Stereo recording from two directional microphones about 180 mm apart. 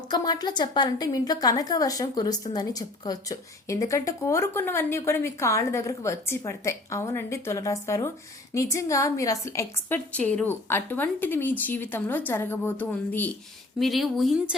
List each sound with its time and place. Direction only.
0.1 s a woman's voice: 25° left (ahead or behind); by 14.3 s centre (ahead or behind)